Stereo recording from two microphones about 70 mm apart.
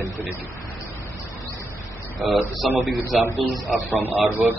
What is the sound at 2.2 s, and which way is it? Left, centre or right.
A man's voice, centre.